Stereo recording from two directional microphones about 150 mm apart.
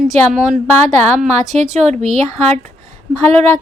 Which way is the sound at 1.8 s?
50° right (ahead or behind).